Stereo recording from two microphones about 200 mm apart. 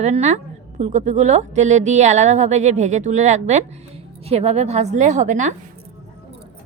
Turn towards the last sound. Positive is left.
turn(degrees=-40)  # may be behind; listen again after turning